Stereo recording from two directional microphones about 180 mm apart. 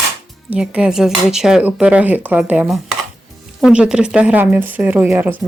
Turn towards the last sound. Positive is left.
turn(degrees=-10)  # may be behind; listen again after turning